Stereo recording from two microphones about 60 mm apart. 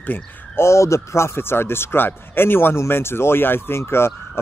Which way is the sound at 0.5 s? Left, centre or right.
Left.